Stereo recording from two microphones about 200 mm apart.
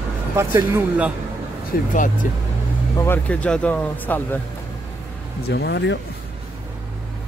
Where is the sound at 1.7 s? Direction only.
50° left (ahead or behind).